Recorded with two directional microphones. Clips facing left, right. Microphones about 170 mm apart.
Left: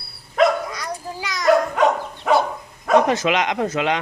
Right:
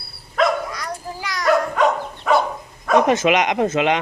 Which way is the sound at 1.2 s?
10° right (ahead or behind).